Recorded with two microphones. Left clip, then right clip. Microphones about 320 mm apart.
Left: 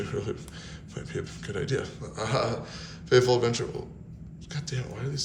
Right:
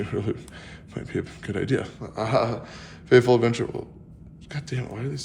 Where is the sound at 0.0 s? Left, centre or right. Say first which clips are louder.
Right 4 dB; right.